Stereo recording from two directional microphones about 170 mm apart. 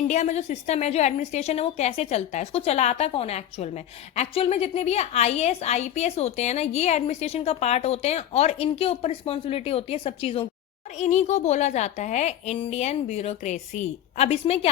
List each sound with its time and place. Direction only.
0.1 s a woman's voice: 40° left (ahead or behind)